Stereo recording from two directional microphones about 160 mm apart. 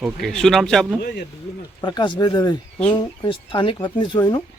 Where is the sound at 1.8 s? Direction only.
30° left (ahead or behind).